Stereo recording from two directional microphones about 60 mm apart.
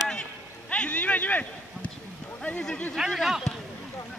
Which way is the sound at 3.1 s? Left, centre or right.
Centre.